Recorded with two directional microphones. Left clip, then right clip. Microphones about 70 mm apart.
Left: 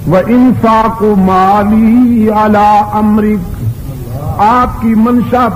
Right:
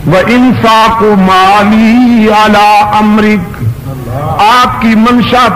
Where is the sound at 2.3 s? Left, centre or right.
Centre.